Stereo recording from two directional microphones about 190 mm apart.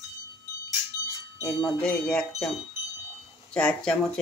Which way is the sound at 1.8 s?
5° left (ahead or behind).